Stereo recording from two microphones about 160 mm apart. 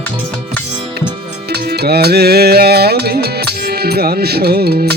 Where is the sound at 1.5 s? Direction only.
80° right.